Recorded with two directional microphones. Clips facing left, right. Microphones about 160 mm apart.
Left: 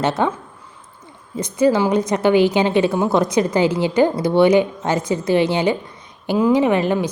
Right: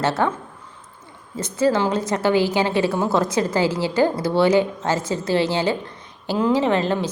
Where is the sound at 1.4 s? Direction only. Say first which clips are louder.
Left 3 dB; 15° left (ahead or behind).